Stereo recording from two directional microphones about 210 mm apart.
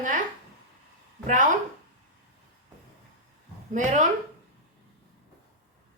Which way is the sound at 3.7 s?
35° right (ahead or behind).